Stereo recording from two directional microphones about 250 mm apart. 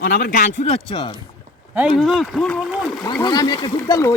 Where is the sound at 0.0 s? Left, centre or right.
Left; by 1.1 s centre.